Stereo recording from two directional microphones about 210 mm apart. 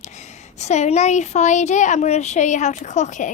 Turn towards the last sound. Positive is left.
turn(degrees=35)  # may be behind; listen again after turning